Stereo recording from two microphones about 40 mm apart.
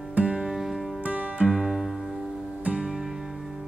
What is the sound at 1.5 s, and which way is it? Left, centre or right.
Music, centre.